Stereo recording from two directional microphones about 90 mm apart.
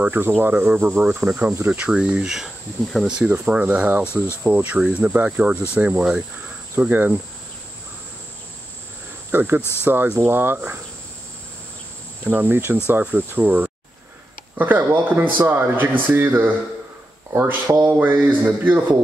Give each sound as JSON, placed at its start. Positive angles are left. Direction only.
{"t": 0.0, "sound": "speech", "side_deg": -20}
{"t": 9.3, "sound": "speech", "side_deg": -20}
{"t": 9.6, "sound": "speech", "side_deg": 25}
{"t": 9.8, "sound": "speech", "side_deg": -25}
{"t": 12.3, "sound": "speech", "side_deg": -20}